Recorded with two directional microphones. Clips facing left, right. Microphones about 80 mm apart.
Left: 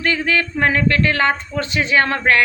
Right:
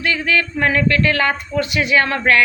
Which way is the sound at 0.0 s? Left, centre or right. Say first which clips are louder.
Even; left.